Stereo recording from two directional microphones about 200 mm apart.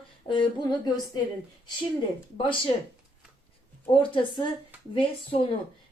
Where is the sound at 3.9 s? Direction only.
25° left (ahead or behind).